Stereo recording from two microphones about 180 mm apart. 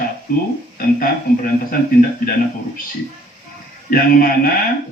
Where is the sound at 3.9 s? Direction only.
55° left (ahead or behind).